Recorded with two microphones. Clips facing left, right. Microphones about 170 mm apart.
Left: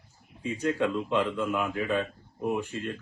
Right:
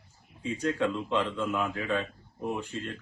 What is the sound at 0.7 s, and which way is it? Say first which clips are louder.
Speech: left 2 dB; 10° left (ahead or behind).